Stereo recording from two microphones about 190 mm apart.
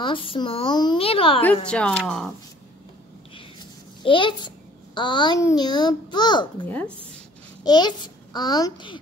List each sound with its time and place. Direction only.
0.0 s a child's voice: 25° left (ahead or behind)
1.4 s speech: 5° left (ahead or behind)
4.0 s a child's voice: 25° left (ahead or behind)
6.6 s a woman's voice: 10° left (ahead or behind)
7.6 s a child's voice: 20° left (ahead or behind)